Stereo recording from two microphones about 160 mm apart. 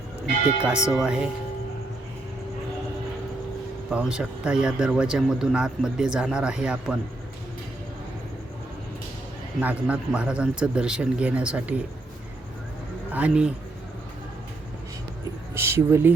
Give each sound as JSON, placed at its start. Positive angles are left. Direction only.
{"t": 0.6, "sound": "speech", "side_deg": -5}
{"t": 3.9, "sound": "speech", "side_deg": -5}
{"t": 9.6, "sound": "speech", "side_deg": -10}
{"t": 13.1, "sound": "speech", "side_deg": -5}
{"t": 15.5, "sound": "speech", "side_deg": -15}